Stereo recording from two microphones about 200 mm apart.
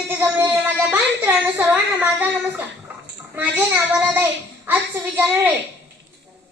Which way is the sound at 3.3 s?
10° right (ahead or behind).